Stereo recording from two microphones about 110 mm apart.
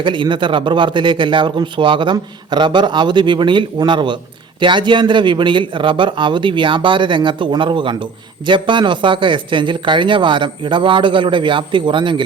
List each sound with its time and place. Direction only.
0.0 s a man's voice: 45° right (ahead or behind)